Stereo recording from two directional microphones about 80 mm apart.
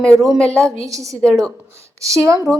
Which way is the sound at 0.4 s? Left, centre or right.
Right.